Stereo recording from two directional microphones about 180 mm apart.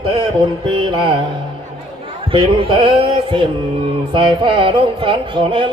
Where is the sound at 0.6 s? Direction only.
25° right (ahead or behind).